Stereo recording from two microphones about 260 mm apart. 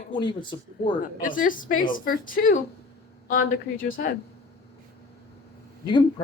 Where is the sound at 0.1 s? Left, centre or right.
Centre.